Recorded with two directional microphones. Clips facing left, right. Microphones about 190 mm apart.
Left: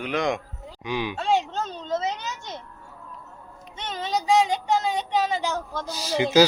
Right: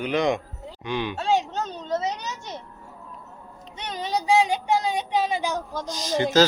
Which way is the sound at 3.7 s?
15° right (ahead or behind).